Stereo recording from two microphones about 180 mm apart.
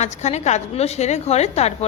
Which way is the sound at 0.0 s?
40° left (ahead or behind).